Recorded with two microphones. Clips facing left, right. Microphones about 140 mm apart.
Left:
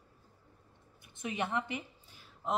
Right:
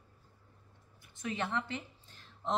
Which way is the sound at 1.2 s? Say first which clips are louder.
Left 1 dB; 15° left (ahead or behind).